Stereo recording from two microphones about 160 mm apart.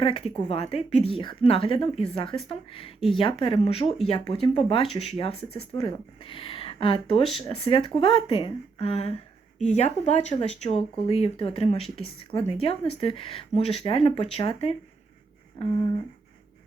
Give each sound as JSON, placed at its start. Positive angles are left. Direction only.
{"t": 0.0, "sound": "speech", "side_deg": 35}